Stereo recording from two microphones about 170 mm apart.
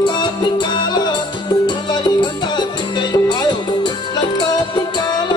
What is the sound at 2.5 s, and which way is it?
Music, 25° left (ahead or behind).